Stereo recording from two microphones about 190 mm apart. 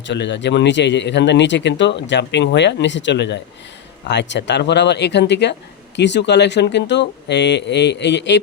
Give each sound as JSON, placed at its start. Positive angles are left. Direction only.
{"t": 0.1, "sound": "speech", "side_deg": 65}